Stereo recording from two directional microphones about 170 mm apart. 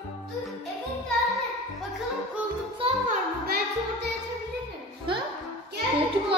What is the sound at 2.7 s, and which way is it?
Music, 35° right (ahead or behind).